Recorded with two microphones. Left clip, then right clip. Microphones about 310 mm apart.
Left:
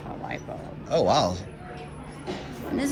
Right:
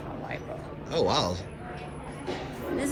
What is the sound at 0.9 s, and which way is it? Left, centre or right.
Speech, centre.